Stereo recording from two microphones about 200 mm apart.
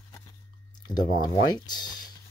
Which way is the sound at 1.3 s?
20° left (ahead or behind).